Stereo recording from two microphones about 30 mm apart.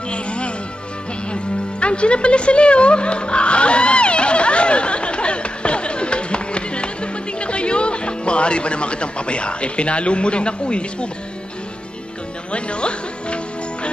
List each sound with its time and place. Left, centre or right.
0.1 s music: left
12.5 s music: left